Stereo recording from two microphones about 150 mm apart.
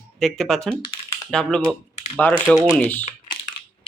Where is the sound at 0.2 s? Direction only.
Centre (ahead or behind).